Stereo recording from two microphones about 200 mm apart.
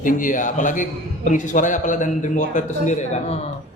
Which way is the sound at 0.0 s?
40° left (ahead or behind).